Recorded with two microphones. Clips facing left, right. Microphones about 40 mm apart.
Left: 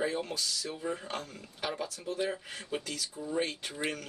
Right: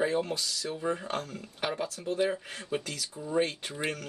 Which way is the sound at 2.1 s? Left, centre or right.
Centre.